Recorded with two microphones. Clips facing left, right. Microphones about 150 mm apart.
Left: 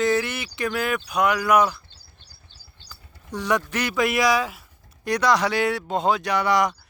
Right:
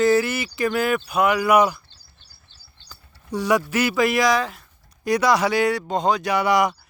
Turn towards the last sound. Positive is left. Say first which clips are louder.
# right 2 dB
turn(degrees=-10)  # may be behind; listen again after turning